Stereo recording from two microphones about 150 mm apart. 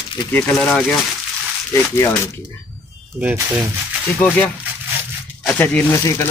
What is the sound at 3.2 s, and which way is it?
Speech, 15° right (ahead or behind).